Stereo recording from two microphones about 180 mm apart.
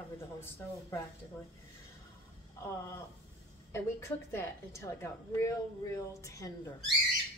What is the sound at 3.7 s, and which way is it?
A woman's voice, 15° left (ahead or behind).